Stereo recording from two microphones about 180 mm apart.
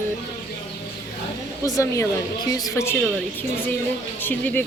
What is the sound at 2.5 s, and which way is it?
Speech, 20° left (ahead or behind).